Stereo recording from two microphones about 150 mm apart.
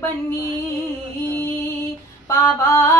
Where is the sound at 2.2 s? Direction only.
15° left (ahead or behind).